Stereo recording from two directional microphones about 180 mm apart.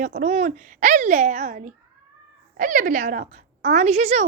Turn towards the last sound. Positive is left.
turn(degrees=-40)  # may be behind; listen again after turning